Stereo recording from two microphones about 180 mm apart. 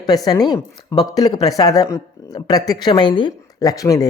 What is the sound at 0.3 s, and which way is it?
Speech, 20° left (ahead or behind).